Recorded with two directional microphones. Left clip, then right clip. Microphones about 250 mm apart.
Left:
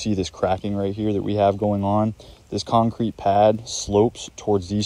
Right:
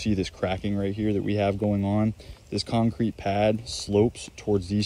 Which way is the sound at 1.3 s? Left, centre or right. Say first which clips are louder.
Left 9 dB; centre.